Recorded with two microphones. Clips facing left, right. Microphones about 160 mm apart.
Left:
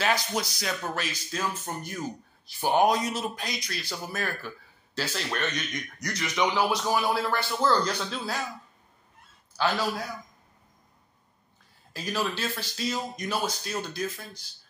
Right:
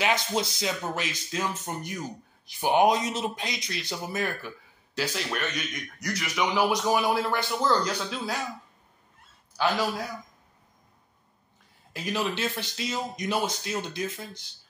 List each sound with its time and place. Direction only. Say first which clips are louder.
0.0 s speech: right 1 dB; 25° right (ahead or behind)
11.9 s speech: right 1 dB; 20° right (ahead or behind)